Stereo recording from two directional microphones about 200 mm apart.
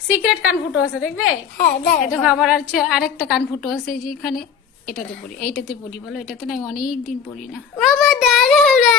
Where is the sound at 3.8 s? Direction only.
45° left (ahead or behind).